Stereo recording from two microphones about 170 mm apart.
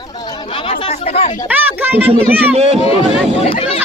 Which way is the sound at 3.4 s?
35° left (ahead or behind).